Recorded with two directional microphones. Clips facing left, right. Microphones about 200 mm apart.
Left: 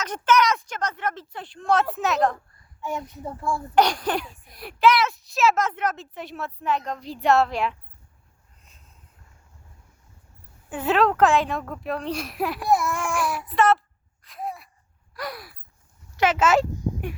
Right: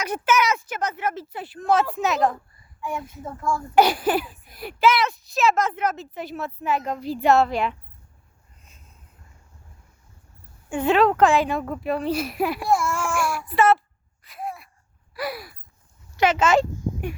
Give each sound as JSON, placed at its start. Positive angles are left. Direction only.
{"t": 0.0, "sound": "speech", "side_deg": -10}
{"t": 3.4, "sound": "speech", "side_deg": 30}
{"t": 3.8, "sound": "a child's voice", "side_deg": -5}
{"t": 10.7, "sound": "a child's voice", "side_deg": 5}
{"t": 13.1, "sound": "a sound", "side_deg": 0}
{"t": 16.1, "sound": "speech", "side_deg": 5}